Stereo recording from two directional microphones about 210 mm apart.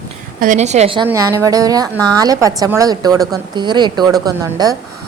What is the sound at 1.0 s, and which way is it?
A woman's voice, 10° right (ahead or behind).